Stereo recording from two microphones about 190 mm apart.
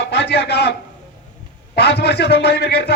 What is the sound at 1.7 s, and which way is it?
Speech, 60° left (ahead or behind).